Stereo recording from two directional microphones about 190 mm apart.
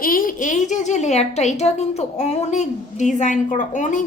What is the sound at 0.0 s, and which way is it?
A woman's voice, 45° left (ahead or behind).